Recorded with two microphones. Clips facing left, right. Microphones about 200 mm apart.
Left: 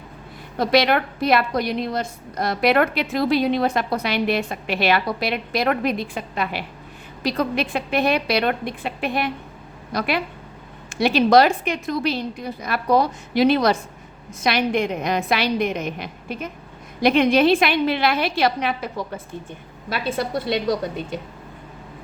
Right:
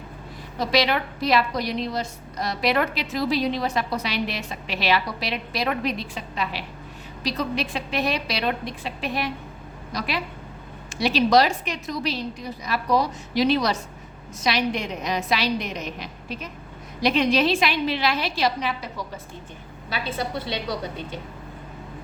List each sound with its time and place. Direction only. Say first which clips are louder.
0.6 s a woman's voice: left 4 dB; 55° left (ahead or behind)